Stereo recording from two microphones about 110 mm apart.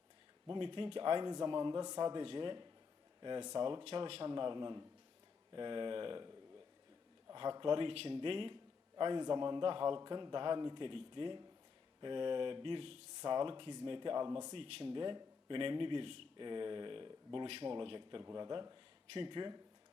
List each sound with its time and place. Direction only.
0.4 s a man's voice: 50° right (ahead or behind)
3.8 s a man's voice: 60° right (ahead or behind)
7.6 s a man's voice: 50° right (ahead or behind)
10.0 s a man's voice: 40° right (ahead or behind)
14.5 s a man's voice: 55° right (ahead or behind)
18.2 s a man's voice: 35° right (ahead or behind)